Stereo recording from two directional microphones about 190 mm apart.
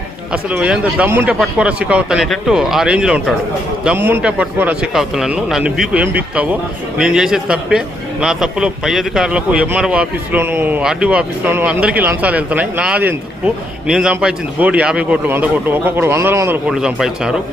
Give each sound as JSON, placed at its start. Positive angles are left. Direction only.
{"t": 0.5, "sound": "a man's voice", "side_deg": -5}